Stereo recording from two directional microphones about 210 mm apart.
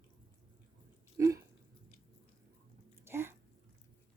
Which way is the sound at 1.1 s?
15° right (ahead or behind).